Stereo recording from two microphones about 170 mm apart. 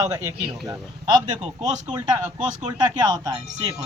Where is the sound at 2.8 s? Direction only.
25° right (ahead or behind).